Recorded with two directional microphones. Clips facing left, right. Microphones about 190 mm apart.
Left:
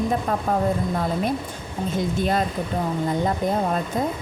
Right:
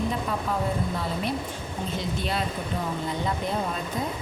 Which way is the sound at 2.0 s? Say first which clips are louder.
Left 8 dB; 50° left (ahead or behind).